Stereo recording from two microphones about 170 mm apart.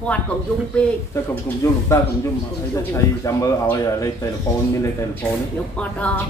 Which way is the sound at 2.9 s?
20° left (ahead or behind).